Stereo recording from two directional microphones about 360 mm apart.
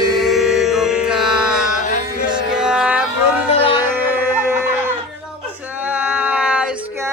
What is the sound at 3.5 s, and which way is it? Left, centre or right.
Music, centre.